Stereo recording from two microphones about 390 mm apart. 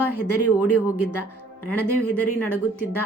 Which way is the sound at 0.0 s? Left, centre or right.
Left.